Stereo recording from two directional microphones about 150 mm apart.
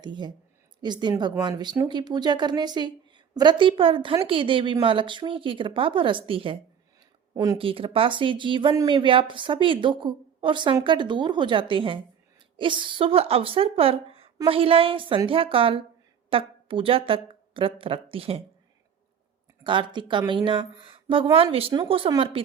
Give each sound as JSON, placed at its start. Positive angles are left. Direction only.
{"t": 0.0, "sound": "a woman's voice", "side_deg": -30}
{"t": 7.3, "sound": "speech", "side_deg": -25}
{"t": 7.6, "sound": "a woman's voice", "side_deg": -35}
{"t": 19.6, "sound": "a woman's voice", "side_deg": -35}